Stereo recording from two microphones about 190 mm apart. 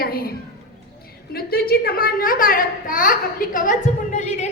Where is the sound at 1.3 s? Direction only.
55° left (ahead or behind).